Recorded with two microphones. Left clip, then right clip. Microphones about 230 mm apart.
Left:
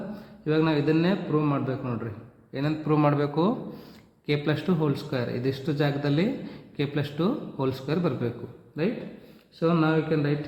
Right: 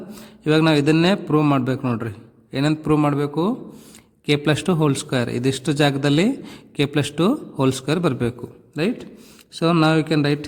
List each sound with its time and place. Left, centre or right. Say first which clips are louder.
0.4 s a man's voice: right 7 dB; right
4.3 s a man's voice: right 7 dB; right